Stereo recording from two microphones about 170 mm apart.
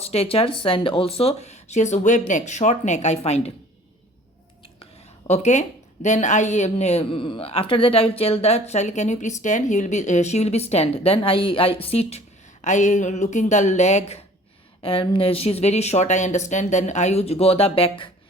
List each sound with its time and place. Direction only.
0.0 s speech: 35° left (ahead or behind)
5.3 s speech: 40° left (ahead or behind)